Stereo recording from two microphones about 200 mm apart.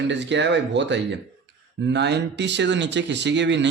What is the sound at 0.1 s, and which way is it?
Speech, 60° right (ahead or behind).